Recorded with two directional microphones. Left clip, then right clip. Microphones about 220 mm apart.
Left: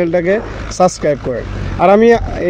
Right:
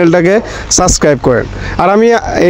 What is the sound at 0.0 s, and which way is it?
Speech, 50° right (ahead or behind).